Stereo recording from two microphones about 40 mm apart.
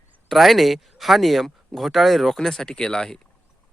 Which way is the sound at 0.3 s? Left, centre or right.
Centre.